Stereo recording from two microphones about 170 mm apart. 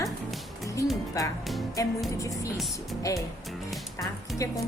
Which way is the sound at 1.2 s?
20° left (ahead or behind).